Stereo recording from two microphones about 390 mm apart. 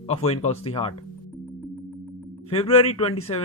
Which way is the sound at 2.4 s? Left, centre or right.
Centre.